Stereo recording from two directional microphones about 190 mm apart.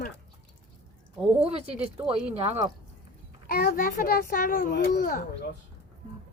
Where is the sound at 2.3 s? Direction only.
35° right (ahead or behind).